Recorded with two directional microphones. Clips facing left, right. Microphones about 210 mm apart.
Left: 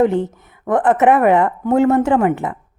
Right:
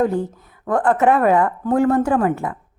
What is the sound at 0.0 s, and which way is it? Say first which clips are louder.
A woman's voice: left 4 dB; 20° left (ahead or behind).